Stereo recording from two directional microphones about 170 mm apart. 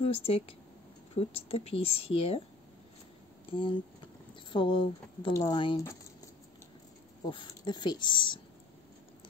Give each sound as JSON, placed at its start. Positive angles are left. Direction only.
{"t": 0.0, "sound": "speech", "side_deg": 35}
{"t": 3.5, "sound": "speech", "side_deg": 30}
{"t": 7.2, "sound": "speech", "side_deg": 25}